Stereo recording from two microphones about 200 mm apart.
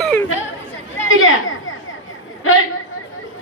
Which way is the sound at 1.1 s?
80° left.